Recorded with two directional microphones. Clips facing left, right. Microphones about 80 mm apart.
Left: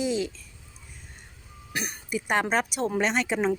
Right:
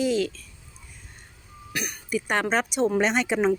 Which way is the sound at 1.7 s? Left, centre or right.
Left.